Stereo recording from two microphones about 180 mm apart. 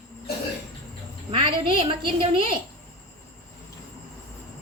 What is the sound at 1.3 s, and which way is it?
A woman's voice, 25° right (ahead or behind).